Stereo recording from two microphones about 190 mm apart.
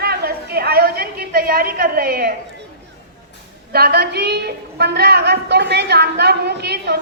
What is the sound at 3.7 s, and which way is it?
A woman's voice, 55° right (ahead or behind).